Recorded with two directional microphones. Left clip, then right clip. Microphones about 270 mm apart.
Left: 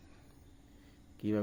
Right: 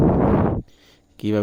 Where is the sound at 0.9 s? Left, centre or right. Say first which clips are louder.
Right 11 dB; right.